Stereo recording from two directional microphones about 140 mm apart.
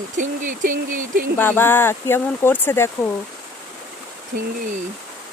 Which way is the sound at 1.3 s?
15° left (ahead or behind).